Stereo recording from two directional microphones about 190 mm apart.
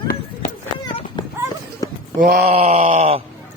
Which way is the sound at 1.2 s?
25° left (ahead or behind).